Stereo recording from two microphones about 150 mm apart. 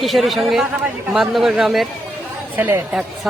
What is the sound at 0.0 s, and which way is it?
A woman's voice, centre (ahead or behind).